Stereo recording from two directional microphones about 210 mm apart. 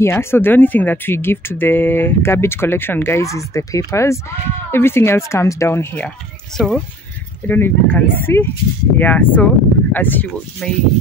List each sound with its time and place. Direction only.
0.0 s speech: 10° left (ahead or behind)